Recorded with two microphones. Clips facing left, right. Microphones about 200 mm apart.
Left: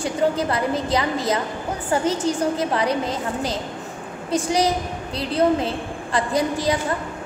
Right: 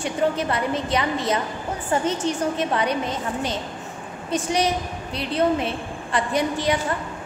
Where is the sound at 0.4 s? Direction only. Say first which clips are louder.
Left 2 dB; 35° left (ahead or behind).